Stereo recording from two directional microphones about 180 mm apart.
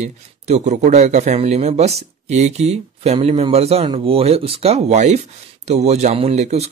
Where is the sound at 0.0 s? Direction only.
40° right (ahead or behind).